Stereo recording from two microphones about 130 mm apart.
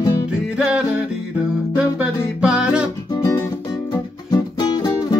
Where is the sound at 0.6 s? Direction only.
5° right (ahead or behind).